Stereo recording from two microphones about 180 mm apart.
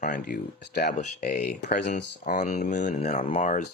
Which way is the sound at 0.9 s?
45° left (ahead or behind).